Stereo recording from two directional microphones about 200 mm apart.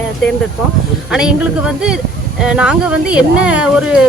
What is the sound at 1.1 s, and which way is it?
Speech, 5° right (ahead or behind).